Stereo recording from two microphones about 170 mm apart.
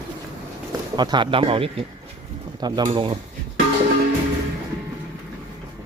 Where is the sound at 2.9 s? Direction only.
30° right (ahead or behind).